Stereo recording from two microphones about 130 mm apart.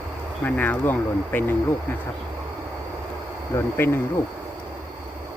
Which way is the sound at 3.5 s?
20° left (ahead or behind).